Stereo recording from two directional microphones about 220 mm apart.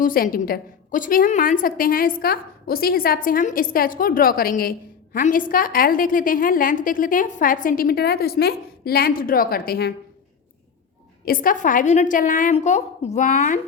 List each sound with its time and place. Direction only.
0.0 s a woman's voice: 40° left (ahead or behind)
11.3 s a woman's voice: 40° left (ahead or behind)